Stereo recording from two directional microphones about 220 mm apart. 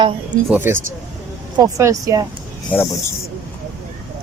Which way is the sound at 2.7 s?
10° left (ahead or behind).